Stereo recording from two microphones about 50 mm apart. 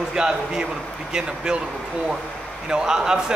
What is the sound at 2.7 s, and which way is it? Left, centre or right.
Speech, centre.